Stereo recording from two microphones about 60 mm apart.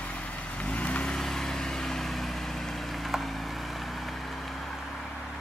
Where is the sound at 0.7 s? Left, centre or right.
Left.